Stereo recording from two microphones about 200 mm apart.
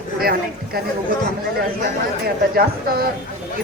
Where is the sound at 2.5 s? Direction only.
50° right (ahead or behind).